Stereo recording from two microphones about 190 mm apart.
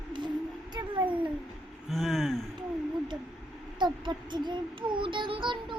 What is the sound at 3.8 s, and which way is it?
Child singing, 25° right (ahead or behind).